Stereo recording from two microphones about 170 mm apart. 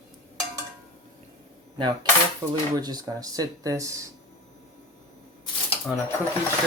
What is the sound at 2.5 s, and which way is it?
Speech, 25° right (ahead or behind).